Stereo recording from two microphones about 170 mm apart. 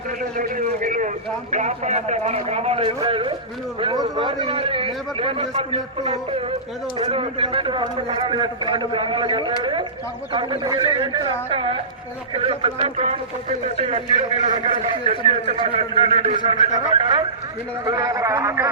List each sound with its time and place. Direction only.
0.3 s a man's voice: 55° right (ahead or behind); by 15.1 s 35° right (ahead or behind)
15.1 s a man's voice: 30° left (ahead or behind)
15.5 s a man's voice: 35° right (ahead or behind); by 18.7 s 20° right (ahead or behind)